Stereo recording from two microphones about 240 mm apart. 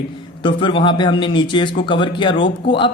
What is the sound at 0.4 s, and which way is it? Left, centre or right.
A woman's voice, left.